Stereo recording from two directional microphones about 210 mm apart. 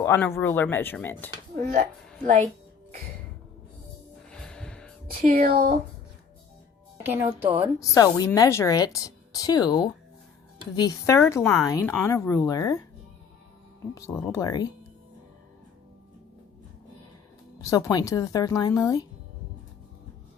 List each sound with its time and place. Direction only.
0.0 s a woman's voice: 10° left (ahead or behind)
1.5 s speech: 35° right (ahead or behind)
4.3 s music: 5° left (ahead or behind)
5.2 s speech: 40° right (ahead or behind)
7.0 s speech: 10° right (ahead or behind)
7.8 s a woman's voice: 15° left (ahead or behind)
13.9 s a woman's voice: 15° left (ahead or behind)
17.6 s a woman's voice: 15° left (ahead or behind)